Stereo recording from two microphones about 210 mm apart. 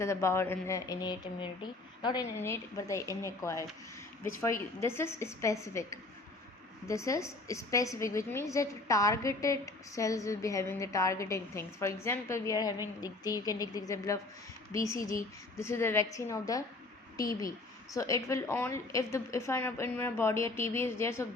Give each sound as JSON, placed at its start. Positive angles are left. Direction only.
{"t": 0.0, "sound": "a woman's voice", "side_deg": 15}
{"t": 4.8, "sound": "a woman's voice", "side_deg": 10}